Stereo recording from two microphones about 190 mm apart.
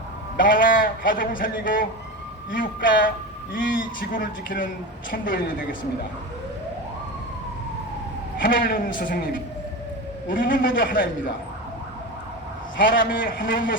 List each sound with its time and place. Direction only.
0.3 s speech: 45° left (ahead or behind)
8.4 s speech: 50° left (ahead or behind)
12.9 s speech: 50° left (ahead or behind)